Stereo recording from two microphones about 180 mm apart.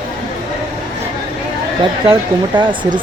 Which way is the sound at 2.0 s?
25° right (ahead or behind).